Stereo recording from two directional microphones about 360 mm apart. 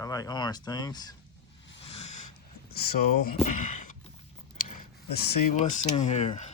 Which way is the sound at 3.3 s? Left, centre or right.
Centre.